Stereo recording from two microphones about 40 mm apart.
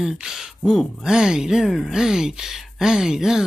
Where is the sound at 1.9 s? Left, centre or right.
Centre.